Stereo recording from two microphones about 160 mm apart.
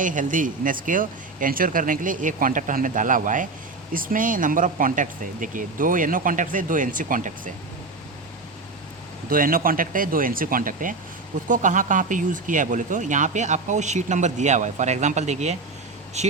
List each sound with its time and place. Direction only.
0.0 s speech: 55° right (ahead or behind)
9.3 s speech: 60° right (ahead or behind); by 16.3 s 45° right (ahead or behind)